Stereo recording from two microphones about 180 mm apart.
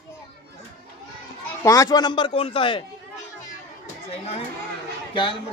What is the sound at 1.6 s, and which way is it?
Speech, 20° left (ahead or behind).